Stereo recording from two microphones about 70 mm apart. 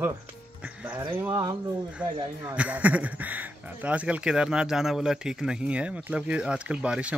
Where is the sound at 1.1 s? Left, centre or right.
Right.